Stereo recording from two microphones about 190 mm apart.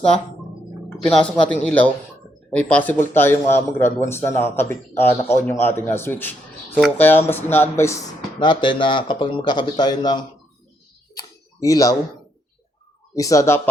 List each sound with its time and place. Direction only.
0.9 s speech: 5° left (ahead or behind); by 10.2 s 20° left (ahead or behind)
11.1 s a sound: 20° left (ahead or behind)
13.1 s speech: 15° left (ahead or behind)